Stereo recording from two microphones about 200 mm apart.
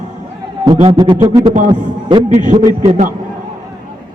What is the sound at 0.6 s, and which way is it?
Music, 25° right (ahead or behind).